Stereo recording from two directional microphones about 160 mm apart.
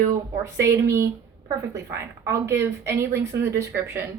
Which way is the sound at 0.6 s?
20° right (ahead or behind).